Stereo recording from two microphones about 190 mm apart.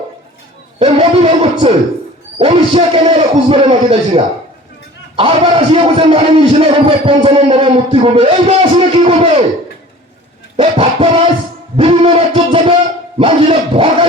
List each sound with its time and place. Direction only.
0.8 s a man's voice: 30° right (ahead or behind)
10.6 s a man's voice: 30° right (ahead or behind)
11.8 s a sound: 25° right (ahead or behind)
13.1 s a man's voice: 30° right (ahead or behind)